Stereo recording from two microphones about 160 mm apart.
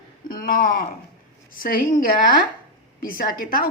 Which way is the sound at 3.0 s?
60° left (ahead or behind).